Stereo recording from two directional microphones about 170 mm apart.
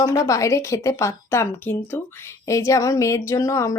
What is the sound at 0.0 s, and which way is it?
A woman's voice, 20° left (ahead or behind).